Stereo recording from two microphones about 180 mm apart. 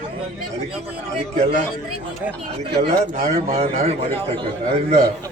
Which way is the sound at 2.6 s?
40° right (ahead or behind).